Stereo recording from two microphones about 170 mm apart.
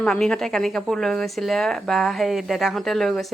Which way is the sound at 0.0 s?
5° left (ahead or behind).